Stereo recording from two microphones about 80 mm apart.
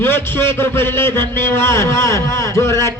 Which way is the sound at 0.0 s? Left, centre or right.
Left.